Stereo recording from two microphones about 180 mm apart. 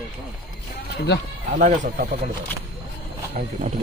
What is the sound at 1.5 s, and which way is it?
Speech, 50° right (ahead or behind).